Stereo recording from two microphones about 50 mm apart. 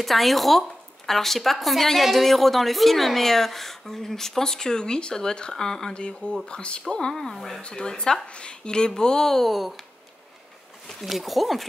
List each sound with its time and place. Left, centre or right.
0.0 s speech: centre
7.6 s speech: centre
10.9 s speech: centre